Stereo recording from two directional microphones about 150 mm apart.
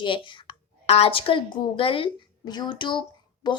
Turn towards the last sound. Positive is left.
turn(degrees=30)  # may be behind; listen again after turning